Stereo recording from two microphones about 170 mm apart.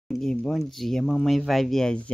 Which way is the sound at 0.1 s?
5° left (ahead or behind).